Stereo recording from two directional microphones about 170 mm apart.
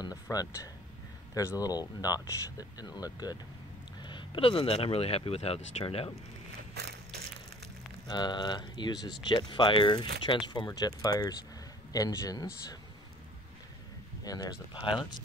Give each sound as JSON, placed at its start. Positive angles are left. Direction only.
{"t": 0.0, "sound": "a sound", "side_deg": 20}
{"t": 1.3, "sound": "speech", "side_deg": 20}
{"t": 6.7, "sound": "crushing", "side_deg": -70}
{"t": 8.1, "sound": "speech", "side_deg": 25}
{"t": 14.2, "sound": "speech", "side_deg": 20}